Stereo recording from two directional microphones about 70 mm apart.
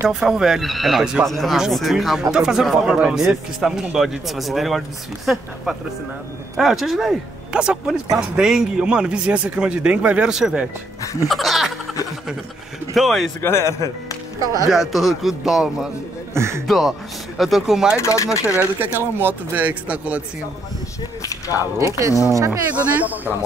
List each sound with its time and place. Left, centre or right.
0.1 s a man's voice: centre
11.2 s speech: centre
12.9 s speech: centre
13.4 s a man's voice: left
14.4 s speech: right
14.7 s speech: centre
16.3 s speech: right
16.6 s a man's voice: centre
17.9 s speech: left
18.8 s speech: right
21.5 s speech: right
22.6 s speech: right